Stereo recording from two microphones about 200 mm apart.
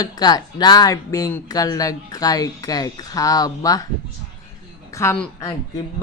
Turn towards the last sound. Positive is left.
turn(degrees=15)  # may be behind; listen again after turning